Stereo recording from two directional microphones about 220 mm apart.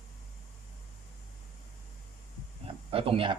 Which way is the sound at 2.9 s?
25° right (ahead or behind).